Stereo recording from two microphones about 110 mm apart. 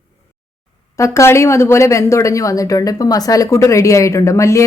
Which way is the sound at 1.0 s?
25° left (ahead or behind).